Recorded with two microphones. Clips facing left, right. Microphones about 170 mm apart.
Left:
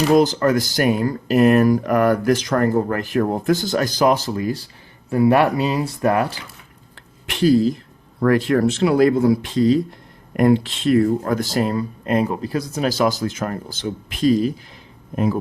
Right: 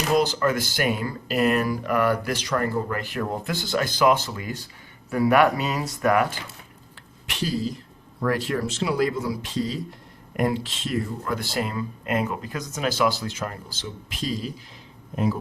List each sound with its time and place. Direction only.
0.2 s speech: 45° left (ahead or behind)
7.3 s speech: 55° left (ahead or behind)